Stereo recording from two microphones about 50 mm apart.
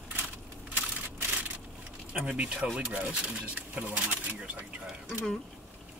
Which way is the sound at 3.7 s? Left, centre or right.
Right.